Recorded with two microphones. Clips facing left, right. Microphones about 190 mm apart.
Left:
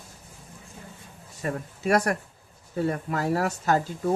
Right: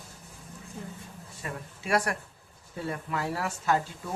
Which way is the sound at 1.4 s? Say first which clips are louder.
Left 9 dB; 45° left (ahead or behind).